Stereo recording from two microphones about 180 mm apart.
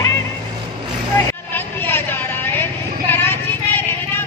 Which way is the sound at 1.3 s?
10° left (ahead or behind).